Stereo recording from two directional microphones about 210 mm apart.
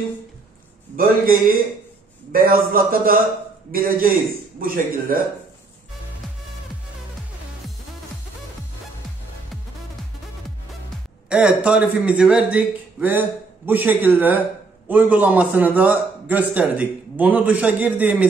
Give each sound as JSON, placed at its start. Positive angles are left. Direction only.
{"t": 0.9, "sound": "a man's voice", "side_deg": -45}
{"t": 4.6, "sound": "speech", "side_deg": -40}
{"t": 11.2, "sound": "a man's voice", "side_deg": -5}